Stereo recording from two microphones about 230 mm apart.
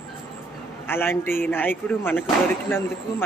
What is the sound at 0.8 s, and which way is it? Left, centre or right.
Speech, centre.